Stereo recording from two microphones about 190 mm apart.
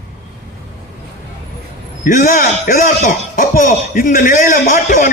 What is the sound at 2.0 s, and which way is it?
A man's voice, 45° left (ahead or behind).